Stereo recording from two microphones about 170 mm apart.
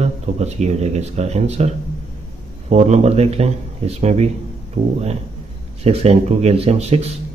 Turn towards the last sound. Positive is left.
turn(degrees=-40)  # may be behind; listen again after turning